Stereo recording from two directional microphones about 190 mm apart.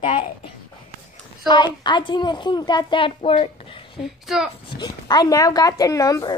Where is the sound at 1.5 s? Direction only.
20° left (ahead or behind).